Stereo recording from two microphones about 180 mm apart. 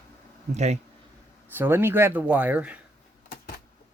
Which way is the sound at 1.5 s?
10° right (ahead or behind).